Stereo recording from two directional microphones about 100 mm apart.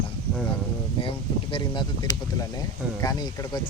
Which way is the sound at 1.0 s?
60° left (ahead or behind).